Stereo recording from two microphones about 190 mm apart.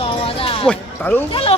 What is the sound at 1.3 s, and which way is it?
Speech, 30° left (ahead or behind).